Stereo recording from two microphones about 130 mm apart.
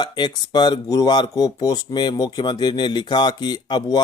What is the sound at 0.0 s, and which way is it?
Speech, 35° left (ahead or behind).